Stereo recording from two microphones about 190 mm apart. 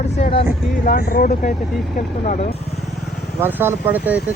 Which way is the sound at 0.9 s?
50° left (ahead or behind).